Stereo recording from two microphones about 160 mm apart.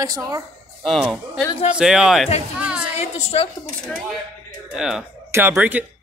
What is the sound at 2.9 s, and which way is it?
Speech, 40° left (ahead or behind).